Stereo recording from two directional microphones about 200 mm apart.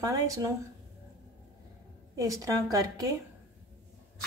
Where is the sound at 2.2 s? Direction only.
15° right (ahead or behind).